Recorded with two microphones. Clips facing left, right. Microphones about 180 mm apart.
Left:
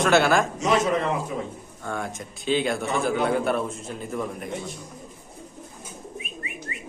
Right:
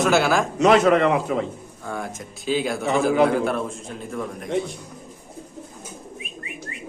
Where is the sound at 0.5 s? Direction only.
65° right (ahead or behind).